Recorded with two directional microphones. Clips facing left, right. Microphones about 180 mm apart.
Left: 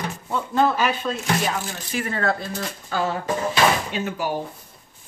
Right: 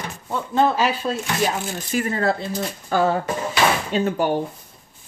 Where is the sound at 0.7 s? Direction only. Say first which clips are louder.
Right 2 dB; 35° right (ahead or behind).